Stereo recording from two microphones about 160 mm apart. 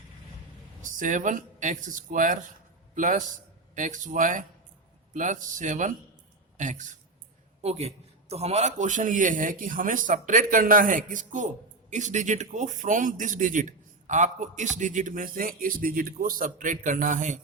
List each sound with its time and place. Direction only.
0.8 s a man's voice: 55° right (ahead or behind)